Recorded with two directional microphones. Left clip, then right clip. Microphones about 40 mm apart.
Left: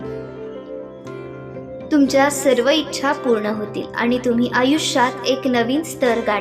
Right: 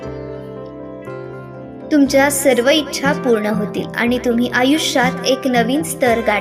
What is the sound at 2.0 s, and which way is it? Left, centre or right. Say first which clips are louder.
A woman's voice: right 2 dB; right.